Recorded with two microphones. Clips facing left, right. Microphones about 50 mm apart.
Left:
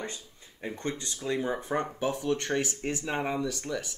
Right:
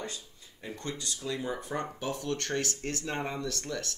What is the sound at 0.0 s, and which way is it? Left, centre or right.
Speech, left.